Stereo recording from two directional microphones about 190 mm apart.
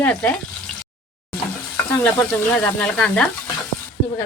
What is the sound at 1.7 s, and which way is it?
Sizzle, 10° left (ahead or behind).